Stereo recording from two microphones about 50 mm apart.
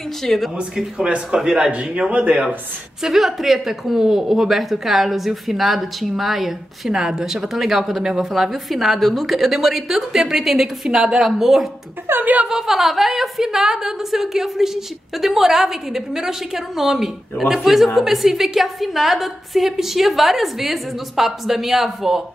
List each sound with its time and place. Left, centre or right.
0.2 s a woman's voice: centre
0.6 s speech: centre
1.7 s a man's voice: right
3.0 s a woman's voice: centre
6.9 s a woman's voice: centre
12.1 s a woman's voice: right
12.4 s a woman's voice: centre